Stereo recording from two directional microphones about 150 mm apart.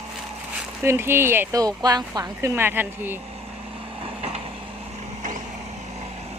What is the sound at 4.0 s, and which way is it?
Vehicle, 40° right (ahead or behind).